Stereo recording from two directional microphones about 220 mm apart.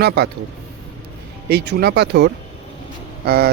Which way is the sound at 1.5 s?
50° right (ahead or behind).